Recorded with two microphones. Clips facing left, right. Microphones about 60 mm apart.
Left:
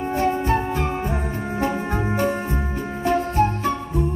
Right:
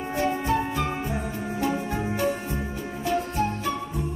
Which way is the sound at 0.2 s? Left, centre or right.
Left.